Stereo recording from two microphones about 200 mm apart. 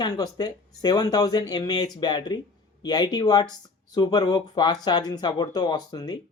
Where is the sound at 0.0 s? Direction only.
20° left (ahead or behind).